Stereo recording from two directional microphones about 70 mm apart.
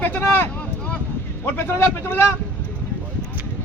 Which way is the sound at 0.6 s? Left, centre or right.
Left.